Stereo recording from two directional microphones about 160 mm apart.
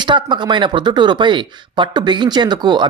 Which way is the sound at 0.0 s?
30° right (ahead or behind).